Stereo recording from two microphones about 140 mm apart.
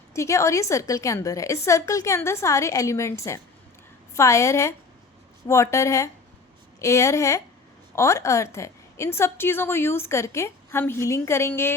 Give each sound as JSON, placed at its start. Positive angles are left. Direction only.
{"t": 0.1, "sound": "a woman's voice", "side_deg": 20}